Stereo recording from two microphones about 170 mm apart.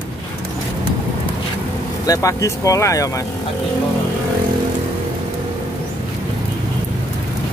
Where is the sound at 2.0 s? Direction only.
20° left (ahead or behind).